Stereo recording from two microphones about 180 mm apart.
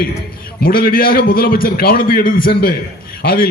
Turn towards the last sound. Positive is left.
turn(degrees=55)  # may be behind; listen again after turning